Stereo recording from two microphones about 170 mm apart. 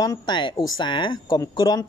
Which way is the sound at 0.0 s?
25° left (ahead or behind).